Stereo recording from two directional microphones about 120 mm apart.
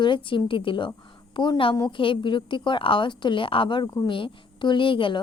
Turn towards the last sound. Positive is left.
turn(degrees=45)  # may be behind; listen again after turning